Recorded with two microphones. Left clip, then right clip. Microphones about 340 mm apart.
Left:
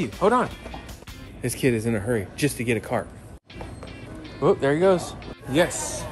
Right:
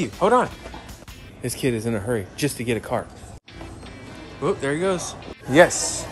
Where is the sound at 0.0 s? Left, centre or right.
Centre.